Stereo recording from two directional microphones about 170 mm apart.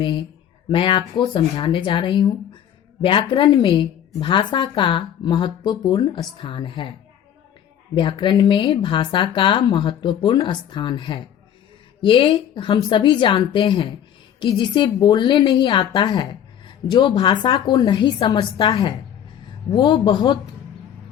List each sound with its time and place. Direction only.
0.0 s a woman's voice: 30° left (ahead or behind)
7.9 s a woman's voice: 30° left (ahead or behind)